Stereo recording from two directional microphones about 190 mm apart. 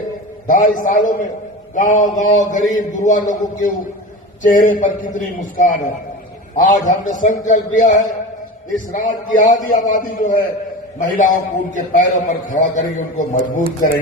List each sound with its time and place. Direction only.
0.4 s a man's voice: 45° left (ahead or behind)